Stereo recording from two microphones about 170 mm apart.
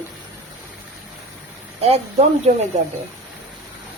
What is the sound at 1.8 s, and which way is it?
Speech, 40° right (ahead or behind).